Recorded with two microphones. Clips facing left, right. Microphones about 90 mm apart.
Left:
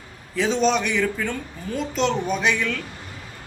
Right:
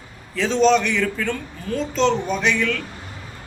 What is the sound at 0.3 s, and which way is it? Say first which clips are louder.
A man's voice: right 4 dB; 15° left (ahead or behind).